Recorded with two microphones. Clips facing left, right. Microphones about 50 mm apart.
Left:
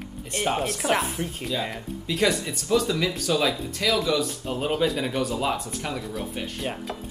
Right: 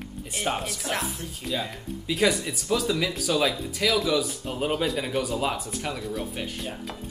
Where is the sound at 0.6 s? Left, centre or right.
Left.